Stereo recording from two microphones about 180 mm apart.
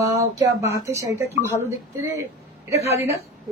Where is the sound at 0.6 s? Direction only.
15° right (ahead or behind).